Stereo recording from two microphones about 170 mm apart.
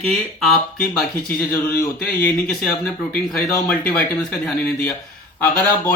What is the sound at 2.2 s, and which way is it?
Speech, 5° left (ahead or behind).